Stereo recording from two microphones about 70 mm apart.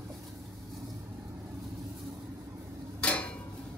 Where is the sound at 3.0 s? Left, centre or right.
Left.